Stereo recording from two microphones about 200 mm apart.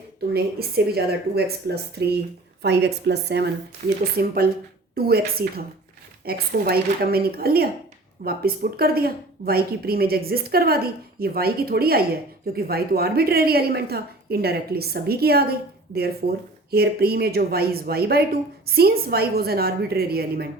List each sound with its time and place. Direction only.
0.9 s a woman's voice: 55° right (ahead or behind)